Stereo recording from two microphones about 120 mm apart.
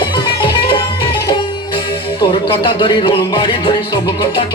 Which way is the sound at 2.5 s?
45° left (ahead or behind).